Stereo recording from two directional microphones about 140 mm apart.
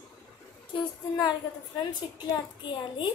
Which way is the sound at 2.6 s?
35° left (ahead or behind).